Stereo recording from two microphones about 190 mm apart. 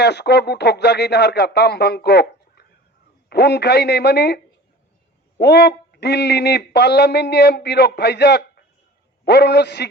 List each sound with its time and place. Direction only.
0.0 s speech: 60° left (ahead or behind)
5.4 s speech: 60° left (ahead or behind)